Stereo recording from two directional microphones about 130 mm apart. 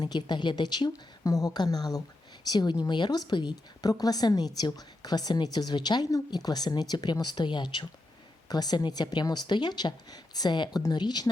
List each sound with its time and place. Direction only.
0.0 s speech: 35° left (ahead or behind)